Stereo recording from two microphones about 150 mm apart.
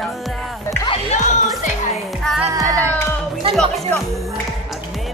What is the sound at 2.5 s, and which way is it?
Music, 20° right (ahead or behind).